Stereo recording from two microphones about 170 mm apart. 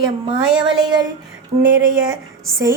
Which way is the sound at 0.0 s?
25° right (ahead or behind).